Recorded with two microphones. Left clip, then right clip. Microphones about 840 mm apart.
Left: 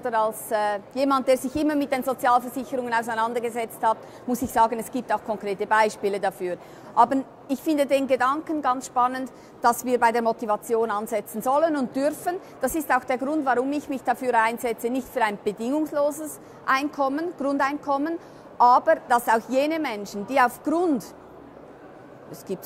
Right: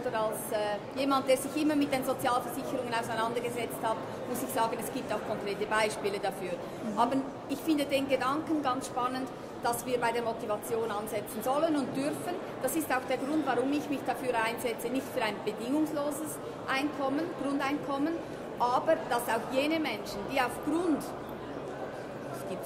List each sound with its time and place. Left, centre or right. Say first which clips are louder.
0.1 s a woman's voice: left 10 dB; left